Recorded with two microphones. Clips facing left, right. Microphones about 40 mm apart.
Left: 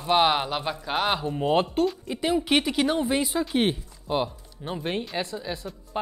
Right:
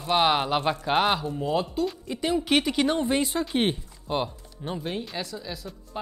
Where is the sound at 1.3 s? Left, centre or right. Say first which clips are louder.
Left 4 dB; left.